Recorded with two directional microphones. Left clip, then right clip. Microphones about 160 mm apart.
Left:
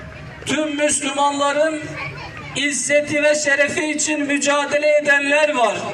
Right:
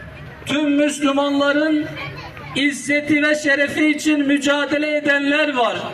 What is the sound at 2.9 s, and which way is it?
Speech, 25° right (ahead or behind).